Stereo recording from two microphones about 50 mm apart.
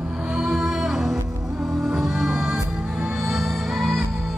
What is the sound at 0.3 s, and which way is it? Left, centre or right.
Music, centre.